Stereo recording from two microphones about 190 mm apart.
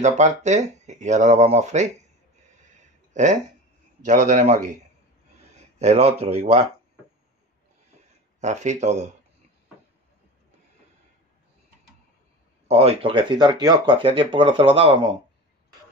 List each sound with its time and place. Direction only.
0.0 s speech: 40° right (ahead or behind)
2.6 s a sound: 40° right (ahead or behind)
4.0 s speech: 40° right (ahead or behind)
8.4 s speech: 40° right (ahead or behind)
12.6 s speech: 30° right (ahead or behind)